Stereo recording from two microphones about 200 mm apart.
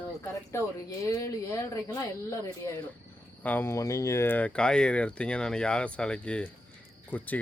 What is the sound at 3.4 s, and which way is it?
Speech, 10° left (ahead or behind).